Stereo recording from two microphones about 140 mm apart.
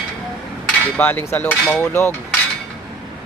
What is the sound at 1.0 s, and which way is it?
Speech, 15° left (ahead or behind).